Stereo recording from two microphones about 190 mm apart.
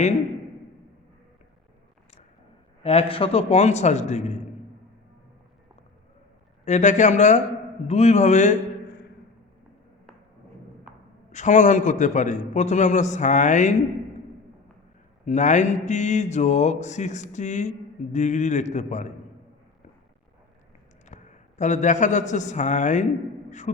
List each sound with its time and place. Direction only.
2.8 s a man's voice: 30° left (ahead or behind)
6.7 s a man's voice: 40° left (ahead or behind)
11.3 s a man's voice: 40° left (ahead or behind)
15.2 s a man's voice: 40° left (ahead or behind)
21.1 s a man's voice: 40° left (ahead or behind)
23.5 s beatboxing: 40° left (ahead or behind)